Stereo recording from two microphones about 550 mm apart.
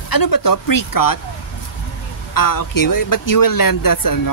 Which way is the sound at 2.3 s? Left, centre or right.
Left.